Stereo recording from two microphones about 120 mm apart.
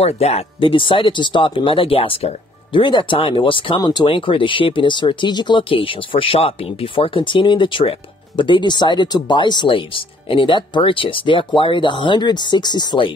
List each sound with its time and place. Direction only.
0.0 s speech: 60° left (ahead or behind); by 13.1 s 40° left (ahead or behind)